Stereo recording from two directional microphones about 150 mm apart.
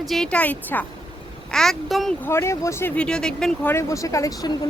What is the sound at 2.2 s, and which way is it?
Speech, 15° left (ahead or behind).